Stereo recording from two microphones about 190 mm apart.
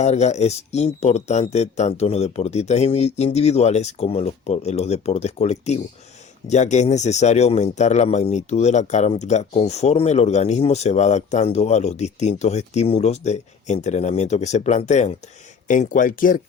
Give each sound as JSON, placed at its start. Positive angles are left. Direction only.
{"t": 0.0, "sound": "a man's voice", "side_deg": 35}